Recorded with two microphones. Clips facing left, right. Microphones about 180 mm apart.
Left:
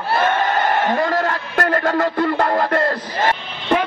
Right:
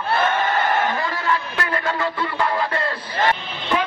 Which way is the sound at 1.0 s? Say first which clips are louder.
Left 4 dB; 45° left (ahead or behind).